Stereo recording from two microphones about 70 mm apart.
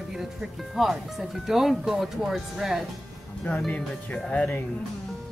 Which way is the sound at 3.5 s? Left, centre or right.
Left.